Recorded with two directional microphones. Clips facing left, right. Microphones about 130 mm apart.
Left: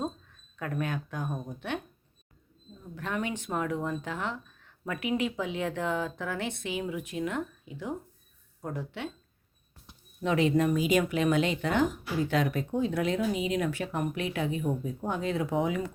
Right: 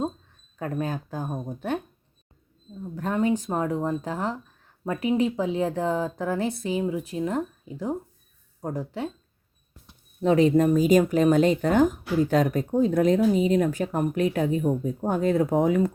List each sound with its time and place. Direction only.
0.5 s speech: 35° right (ahead or behind)
2.9 s speech: 35° right (ahead or behind)
10.2 s speech: 35° right (ahead or behind)